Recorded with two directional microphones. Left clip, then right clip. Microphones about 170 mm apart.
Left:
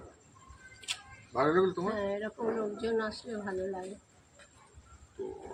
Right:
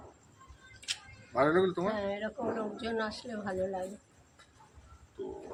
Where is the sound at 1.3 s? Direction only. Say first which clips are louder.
Even; centre (ahead or behind).